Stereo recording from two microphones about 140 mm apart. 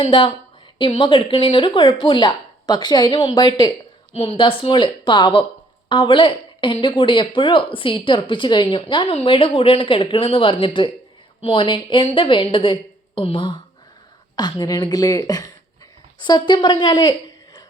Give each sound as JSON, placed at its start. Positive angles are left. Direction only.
{"t": 0.0, "sound": "speech", "side_deg": 35}
{"t": 4.1, "sound": "a woman's voice", "side_deg": 45}